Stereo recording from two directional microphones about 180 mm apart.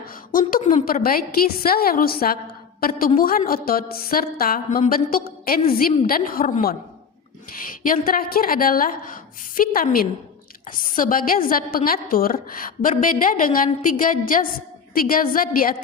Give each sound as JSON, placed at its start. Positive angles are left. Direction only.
{"t": 0.3, "sound": "a woman's voice", "side_deg": 50}